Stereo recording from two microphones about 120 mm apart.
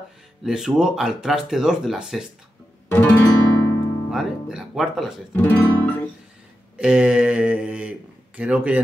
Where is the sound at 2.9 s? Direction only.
15° left (ahead or behind).